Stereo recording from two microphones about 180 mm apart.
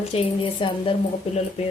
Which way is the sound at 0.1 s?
30° left (ahead or behind).